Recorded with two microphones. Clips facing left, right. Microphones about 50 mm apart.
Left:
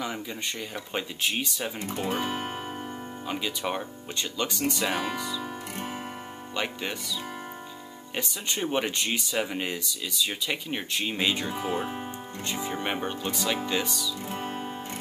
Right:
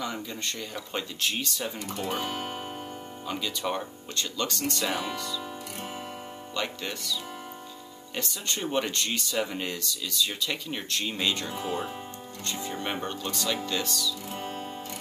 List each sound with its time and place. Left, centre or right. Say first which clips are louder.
0.0 s speech: left 1 dB; centre
8.2 s speech: left 2 dB; centre
14.3 s music: left 2 dB; centre